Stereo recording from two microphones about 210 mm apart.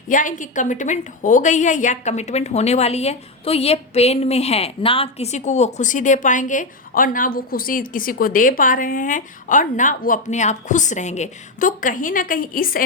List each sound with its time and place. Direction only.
0.1 s a woman's voice: 40° left (ahead or behind)